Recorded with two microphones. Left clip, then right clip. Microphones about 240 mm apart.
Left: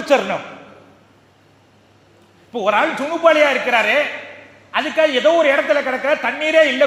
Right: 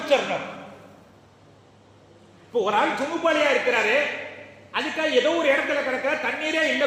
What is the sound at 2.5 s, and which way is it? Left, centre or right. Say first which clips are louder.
A man's voice: left 5 dB; left.